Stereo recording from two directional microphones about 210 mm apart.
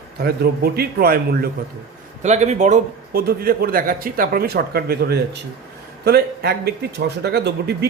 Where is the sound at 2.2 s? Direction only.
35° right (ahead or behind).